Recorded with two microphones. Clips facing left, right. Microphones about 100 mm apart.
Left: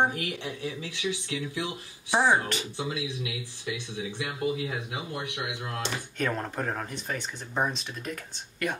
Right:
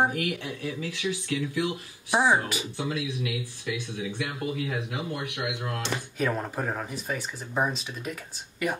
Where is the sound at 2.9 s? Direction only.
50° right (ahead or behind).